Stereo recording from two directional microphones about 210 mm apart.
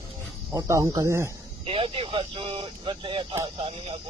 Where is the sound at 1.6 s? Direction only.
25° right (ahead or behind).